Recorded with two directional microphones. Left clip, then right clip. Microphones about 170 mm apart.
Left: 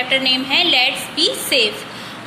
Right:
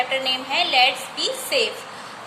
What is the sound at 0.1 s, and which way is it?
A woman's voice, centre (ahead or behind).